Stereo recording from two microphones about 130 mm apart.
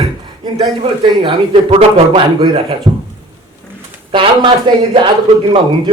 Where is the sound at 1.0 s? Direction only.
40° right (ahead or behind).